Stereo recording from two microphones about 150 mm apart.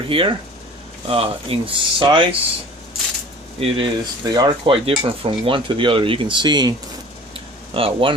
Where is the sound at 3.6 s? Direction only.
30° right (ahead or behind).